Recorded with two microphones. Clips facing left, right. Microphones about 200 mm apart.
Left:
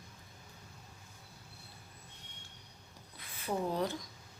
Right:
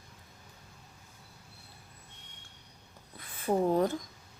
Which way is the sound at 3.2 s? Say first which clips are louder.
Right 7 dB; 50° right (ahead or behind).